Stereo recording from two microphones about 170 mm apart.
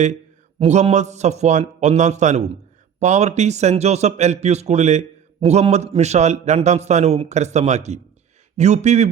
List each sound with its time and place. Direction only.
0.6 s a man's voice: 40° right (ahead or behind)